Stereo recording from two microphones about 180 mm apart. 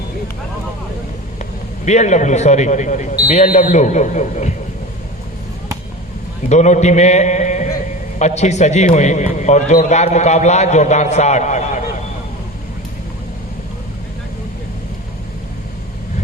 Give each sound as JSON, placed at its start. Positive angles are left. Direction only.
{"t": 1.8, "sound": "a man's voice", "side_deg": 40}
{"t": 6.5, "sound": "a man's voice", "side_deg": 40}